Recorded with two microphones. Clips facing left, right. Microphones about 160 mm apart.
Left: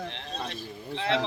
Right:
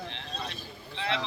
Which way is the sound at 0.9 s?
55° left (ahead or behind).